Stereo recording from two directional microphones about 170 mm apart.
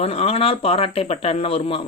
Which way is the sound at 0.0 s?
35° left (ahead or behind).